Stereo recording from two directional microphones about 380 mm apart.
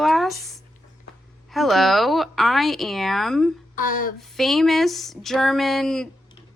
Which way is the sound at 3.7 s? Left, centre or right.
Left.